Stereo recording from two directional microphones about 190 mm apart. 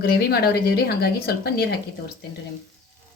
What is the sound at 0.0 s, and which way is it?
A woman's voice, 55° left (ahead or behind).